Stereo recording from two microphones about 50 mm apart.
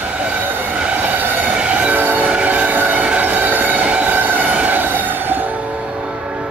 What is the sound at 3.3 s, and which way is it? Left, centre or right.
Train, right.